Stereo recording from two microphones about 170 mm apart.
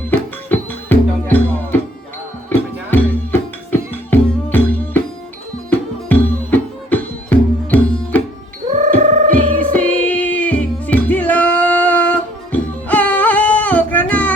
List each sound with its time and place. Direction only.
0.1 s music: 10° left (ahead or behind)
3.7 s music: 10° left (ahead or behind)
8.7 s music: 45° right (ahead or behind)
9.6 s music: 10° left (ahead or behind)